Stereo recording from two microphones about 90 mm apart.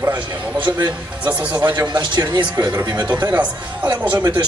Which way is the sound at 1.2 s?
15° right (ahead or behind).